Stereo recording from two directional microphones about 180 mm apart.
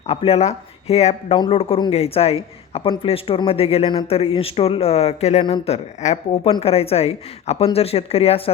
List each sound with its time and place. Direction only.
0.1 s speech: 35° left (ahead or behind)